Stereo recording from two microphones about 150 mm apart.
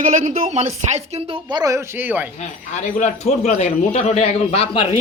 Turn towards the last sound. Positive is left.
turn(degrees=40)  # may be behind; listen again after turning